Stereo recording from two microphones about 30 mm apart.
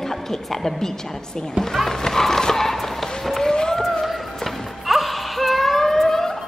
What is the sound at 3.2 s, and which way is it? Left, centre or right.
Run, centre.